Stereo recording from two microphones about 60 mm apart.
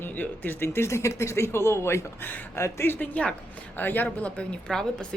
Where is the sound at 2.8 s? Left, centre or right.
Left.